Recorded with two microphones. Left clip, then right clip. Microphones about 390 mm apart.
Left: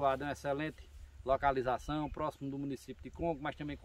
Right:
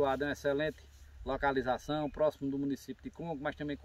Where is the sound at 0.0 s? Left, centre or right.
Centre.